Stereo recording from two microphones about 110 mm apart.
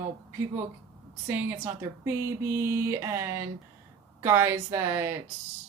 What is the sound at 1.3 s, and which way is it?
Speech, 15° right (ahead or behind).